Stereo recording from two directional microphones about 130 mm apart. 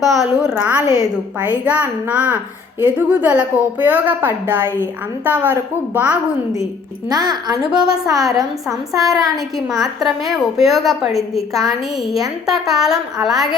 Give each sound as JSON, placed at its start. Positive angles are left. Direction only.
{"t": 0.0, "sound": "a woman's voice", "side_deg": 0}
{"t": 7.1, "sound": "a woman's voice", "side_deg": -30}
{"t": 9.8, "sound": "a woman's voice", "side_deg": 0}